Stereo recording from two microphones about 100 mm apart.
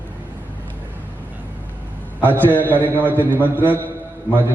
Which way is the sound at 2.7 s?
20° right (ahead or behind).